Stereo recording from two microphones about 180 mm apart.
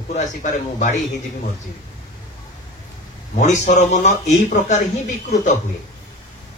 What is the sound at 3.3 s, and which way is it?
A man's voice, 45° left (ahead or behind).